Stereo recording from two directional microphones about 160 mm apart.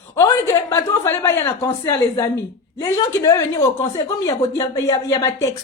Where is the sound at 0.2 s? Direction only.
20° left (ahead or behind).